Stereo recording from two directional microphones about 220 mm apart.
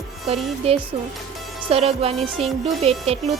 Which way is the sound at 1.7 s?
25° right (ahead or behind).